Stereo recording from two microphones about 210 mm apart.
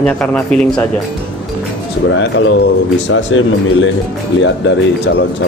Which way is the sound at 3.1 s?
65° left (ahead or behind).